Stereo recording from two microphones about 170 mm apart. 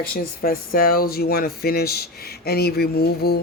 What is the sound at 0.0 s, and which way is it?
Speech, 60° left (ahead or behind).